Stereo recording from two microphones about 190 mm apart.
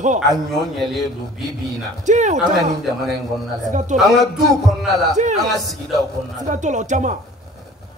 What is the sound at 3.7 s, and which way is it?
Speech, 40° right (ahead or behind).